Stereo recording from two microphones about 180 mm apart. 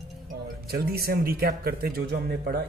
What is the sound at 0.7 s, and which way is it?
Speech, 60° right (ahead or behind).